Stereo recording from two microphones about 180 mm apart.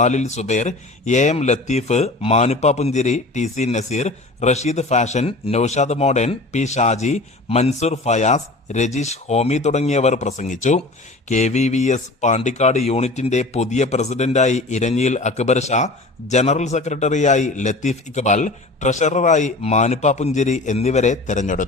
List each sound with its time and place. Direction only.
0.0 s speech: 40° left (ahead or behind)